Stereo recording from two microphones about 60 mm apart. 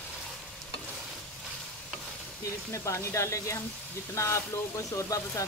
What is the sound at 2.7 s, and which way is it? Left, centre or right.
Speech, left.